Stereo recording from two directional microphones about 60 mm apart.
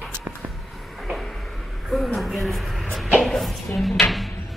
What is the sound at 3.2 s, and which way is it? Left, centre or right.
Music, centre.